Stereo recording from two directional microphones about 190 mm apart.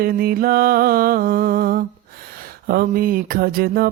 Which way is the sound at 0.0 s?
50° right (ahead or behind).